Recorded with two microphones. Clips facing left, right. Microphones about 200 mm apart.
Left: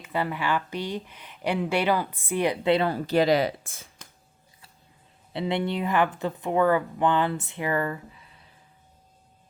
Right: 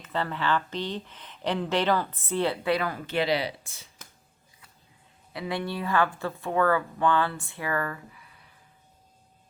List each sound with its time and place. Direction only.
0.0 s speech: 10° left (ahead or behind); by 3.8 s 50° left (ahead or behind)
5.3 s speech: 25° left (ahead or behind)